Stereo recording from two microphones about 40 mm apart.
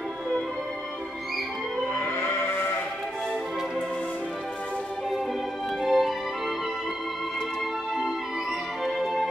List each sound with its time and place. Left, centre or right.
2.0 s sheep: left
5.8 s music: centre
8.8 s music: centre